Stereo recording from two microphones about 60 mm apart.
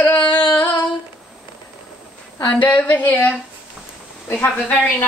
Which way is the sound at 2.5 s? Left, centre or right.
Left.